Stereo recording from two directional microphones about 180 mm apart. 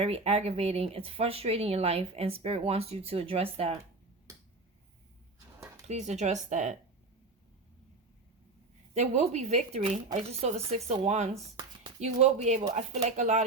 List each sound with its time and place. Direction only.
0.0 s speech: 35° right (ahead or behind)
5.9 s speech: 40° right (ahead or behind)
9.0 s speech: 40° right (ahead or behind)